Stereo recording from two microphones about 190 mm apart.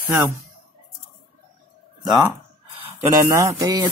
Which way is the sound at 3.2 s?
15° right (ahead or behind).